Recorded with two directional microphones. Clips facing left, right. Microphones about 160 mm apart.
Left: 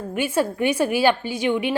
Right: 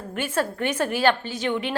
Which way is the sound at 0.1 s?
10° left (ahead or behind).